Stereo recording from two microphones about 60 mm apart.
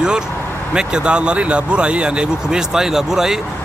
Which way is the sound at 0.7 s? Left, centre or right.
Centre.